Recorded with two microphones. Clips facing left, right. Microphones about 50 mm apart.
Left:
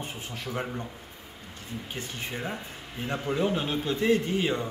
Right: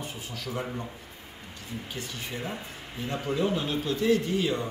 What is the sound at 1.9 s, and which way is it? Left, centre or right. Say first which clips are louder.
A man's voice: left 2 dB; left.